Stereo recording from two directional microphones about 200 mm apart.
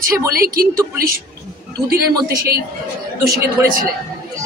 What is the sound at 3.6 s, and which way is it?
Speech, 10° right (ahead or behind).